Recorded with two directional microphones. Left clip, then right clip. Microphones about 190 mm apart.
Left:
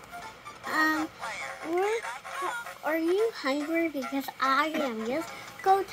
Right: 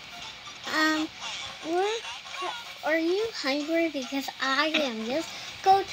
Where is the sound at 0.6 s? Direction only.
30° right (ahead or behind).